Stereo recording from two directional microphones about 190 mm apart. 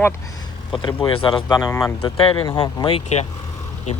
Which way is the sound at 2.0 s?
25° left (ahead or behind).